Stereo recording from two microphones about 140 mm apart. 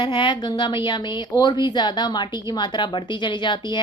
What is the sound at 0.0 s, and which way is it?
A woman's voice, 35° left (ahead or behind).